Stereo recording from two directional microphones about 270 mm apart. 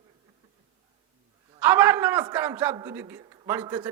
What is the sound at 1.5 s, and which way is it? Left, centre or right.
A man's voice, centre.